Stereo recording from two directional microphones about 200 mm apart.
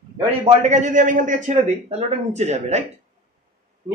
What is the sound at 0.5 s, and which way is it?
Speech, 35° right (ahead or behind).